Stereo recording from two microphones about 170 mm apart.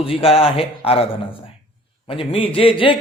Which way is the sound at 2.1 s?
30° left (ahead or behind).